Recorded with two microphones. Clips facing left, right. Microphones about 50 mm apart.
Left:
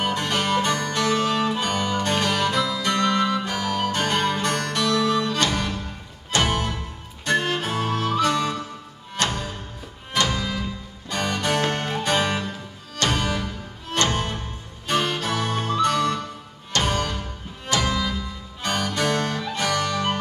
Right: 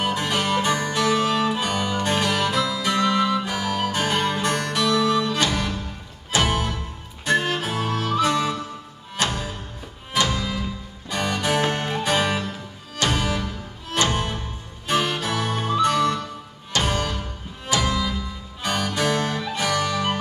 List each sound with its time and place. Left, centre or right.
0.0 s music: centre
8.2 s music: centre
11.6 s music: right
11.9 s music: centre